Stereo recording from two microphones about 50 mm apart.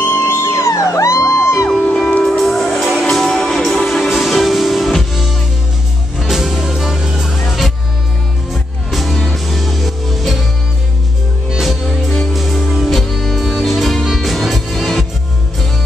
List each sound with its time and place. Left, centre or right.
0.0 s music: left
2.2 s music: centre
3.1 s music: centre
8.9 s music: centre
11.5 s music: centre